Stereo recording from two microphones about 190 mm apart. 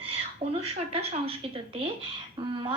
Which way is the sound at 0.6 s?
30° right (ahead or behind).